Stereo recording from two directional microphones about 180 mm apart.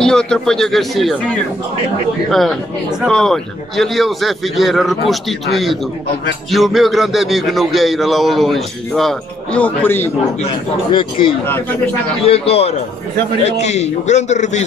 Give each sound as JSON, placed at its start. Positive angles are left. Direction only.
{"t": 0.0, "sound": "a man's voice", "side_deg": 5}
{"t": 10.4, "sound": "a man's voice", "side_deg": 25}